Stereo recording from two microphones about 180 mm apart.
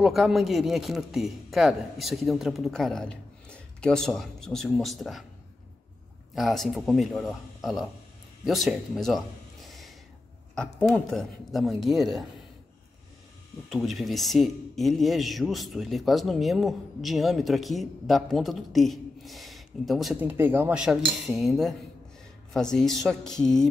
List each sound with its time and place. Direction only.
0.0 s a man's voice: centre (ahead or behind)
6.3 s a man's voice: centre (ahead or behind)
13.7 s a man's voice: centre (ahead or behind)